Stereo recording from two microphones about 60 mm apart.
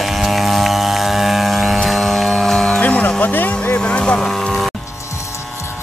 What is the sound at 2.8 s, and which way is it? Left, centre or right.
Music, left.